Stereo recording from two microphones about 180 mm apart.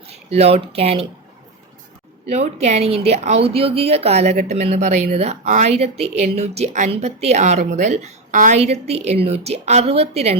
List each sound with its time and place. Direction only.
0.1 s speech: 35° right (ahead or behind)
2.3 s a woman's voice: 35° right (ahead or behind)